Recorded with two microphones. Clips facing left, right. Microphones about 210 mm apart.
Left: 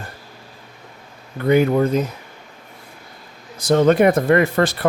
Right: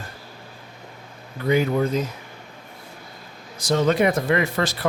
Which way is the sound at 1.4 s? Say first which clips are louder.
Left 5 dB; 55° left (ahead or behind).